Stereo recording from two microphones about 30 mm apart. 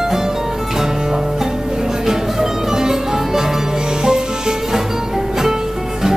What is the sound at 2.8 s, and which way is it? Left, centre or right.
Music, centre.